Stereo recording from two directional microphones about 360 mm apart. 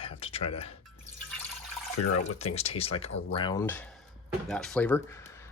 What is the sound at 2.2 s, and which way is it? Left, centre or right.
Speech, centre.